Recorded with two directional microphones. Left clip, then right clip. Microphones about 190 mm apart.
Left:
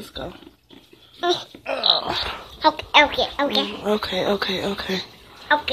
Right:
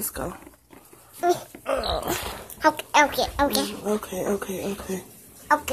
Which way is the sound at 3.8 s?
10° left (ahead or behind).